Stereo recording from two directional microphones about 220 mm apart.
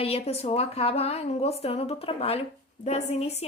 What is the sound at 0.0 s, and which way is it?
A woman's voice, 30° left (ahead or behind).